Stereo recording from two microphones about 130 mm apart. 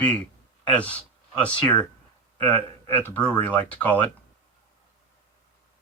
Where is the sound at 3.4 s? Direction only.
10° left (ahead or behind).